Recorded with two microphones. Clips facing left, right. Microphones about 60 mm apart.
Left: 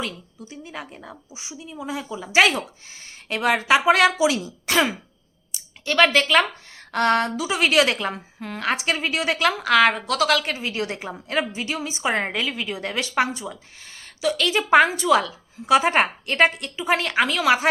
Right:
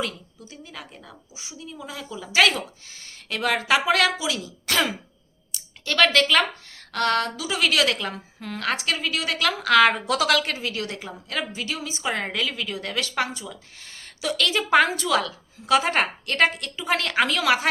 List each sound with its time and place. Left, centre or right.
0.4 s a woman's voice: left
4.6 s throat clearing: centre
5.5 s speech: centre
6.9 s a woman's voice: left
9.5 s a woman's voice: centre
10.6 s a woman's voice: left
14.2 s a woman's voice: centre